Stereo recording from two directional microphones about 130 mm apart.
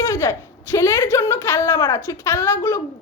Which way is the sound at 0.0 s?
20° left (ahead or behind).